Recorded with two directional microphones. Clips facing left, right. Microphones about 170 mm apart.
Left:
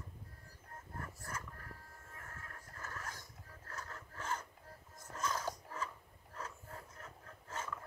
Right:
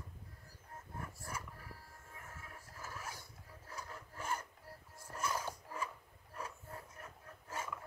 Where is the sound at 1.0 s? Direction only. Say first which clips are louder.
Even; 10° right (ahead or behind).